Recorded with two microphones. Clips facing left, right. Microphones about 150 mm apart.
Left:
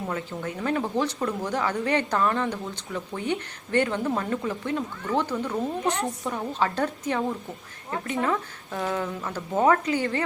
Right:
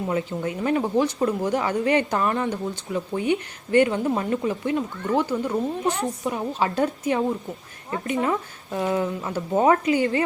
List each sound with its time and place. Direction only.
0.1 s speech: 15° right (ahead or behind)
5.8 s a woman's voice: 5° right (ahead or behind)